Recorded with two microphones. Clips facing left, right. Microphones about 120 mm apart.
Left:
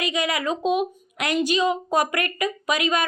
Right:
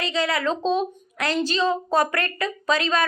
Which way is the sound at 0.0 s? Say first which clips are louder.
Right 1 dB; 15° left (ahead or behind).